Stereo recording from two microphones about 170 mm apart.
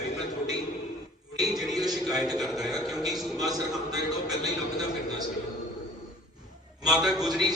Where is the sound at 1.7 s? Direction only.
25° right (ahead or behind).